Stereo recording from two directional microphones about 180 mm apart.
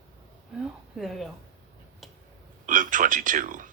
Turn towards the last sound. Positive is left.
turn(degrees=-45)  # may be behind; listen again after turning